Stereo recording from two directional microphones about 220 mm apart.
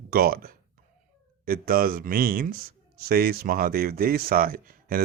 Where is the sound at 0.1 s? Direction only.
40° right (ahead or behind).